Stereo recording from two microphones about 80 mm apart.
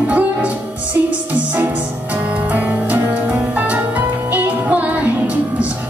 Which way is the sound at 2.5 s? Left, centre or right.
Right.